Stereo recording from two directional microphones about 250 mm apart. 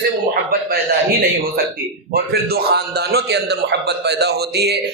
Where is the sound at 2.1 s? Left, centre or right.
Right.